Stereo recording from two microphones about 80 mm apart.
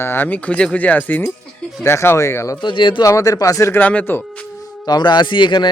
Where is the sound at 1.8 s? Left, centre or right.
Left.